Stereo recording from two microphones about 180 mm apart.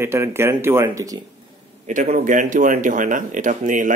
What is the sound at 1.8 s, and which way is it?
Speech, 45° right (ahead or behind).